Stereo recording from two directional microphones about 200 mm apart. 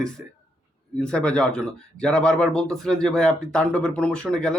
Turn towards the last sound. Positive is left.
turn(degrees=5)  # may be behind; listen again after turning